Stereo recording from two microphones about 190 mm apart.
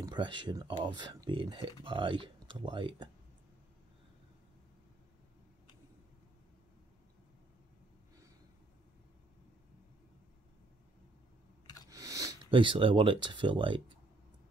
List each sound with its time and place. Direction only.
0.0 s speech: 25° right (ahead or behind)
11.9 s speech: 15° right (ahead or behind)